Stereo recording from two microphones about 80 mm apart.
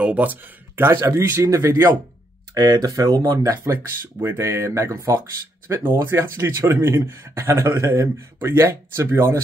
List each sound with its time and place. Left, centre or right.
0.0 s speech: centre
1.0 s speech: right
2.5 s speech: right
3.4 s speech: right